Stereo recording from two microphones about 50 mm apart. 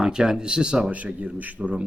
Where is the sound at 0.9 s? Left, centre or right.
Right.